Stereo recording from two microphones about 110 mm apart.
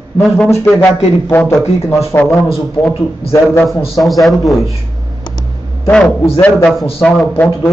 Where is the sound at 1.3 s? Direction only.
20° left (ahead or behind).